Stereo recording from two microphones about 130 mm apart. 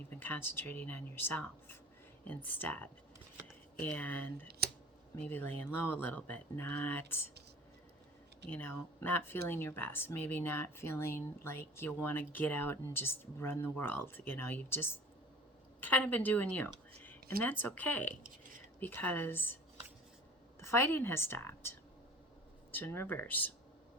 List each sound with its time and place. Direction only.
0.1 s speech: 15° left (ahead or behind)
8.4 s speech: 15° left (ahead or behind)
20.6 s a woman's voice: 20° left (ahead or behind)